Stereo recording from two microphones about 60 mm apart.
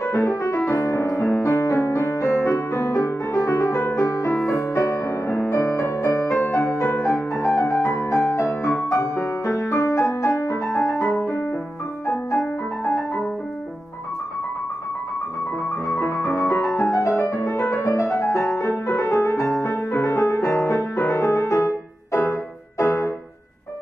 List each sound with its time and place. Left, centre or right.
0.0 s music: left
6.4 s music: left
8.8 s music: left
15.9 s music: left